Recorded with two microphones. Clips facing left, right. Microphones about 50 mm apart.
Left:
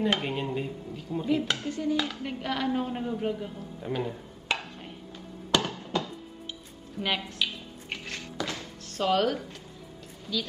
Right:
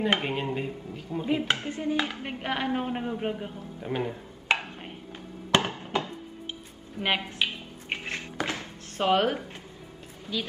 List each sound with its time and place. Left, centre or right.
0.1 s speech: right
3.9 s dishes: right
5.5 s music: right
7.0 s a sound: right